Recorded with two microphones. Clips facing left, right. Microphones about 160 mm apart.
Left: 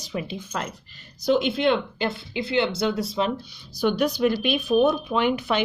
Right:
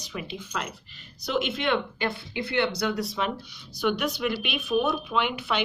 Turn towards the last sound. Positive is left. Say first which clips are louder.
# left 5 dB
turn(degrees=40)  # may be behind; listen again after turning